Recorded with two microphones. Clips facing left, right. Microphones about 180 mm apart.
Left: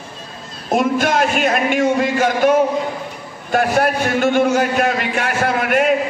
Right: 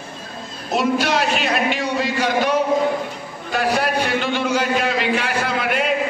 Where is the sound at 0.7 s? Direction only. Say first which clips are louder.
Left 3 dB; 50° left (ahead or behind).